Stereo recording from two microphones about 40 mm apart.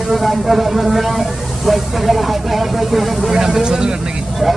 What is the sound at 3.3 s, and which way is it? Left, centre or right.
Speech, centre.